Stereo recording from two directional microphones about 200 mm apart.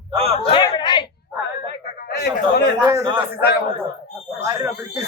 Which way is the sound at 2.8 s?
20° right (ahead or behind).